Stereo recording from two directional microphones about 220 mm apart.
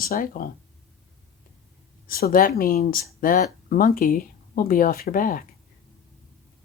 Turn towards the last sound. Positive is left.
turn(degrees=40)  # may be behind; listen again after turning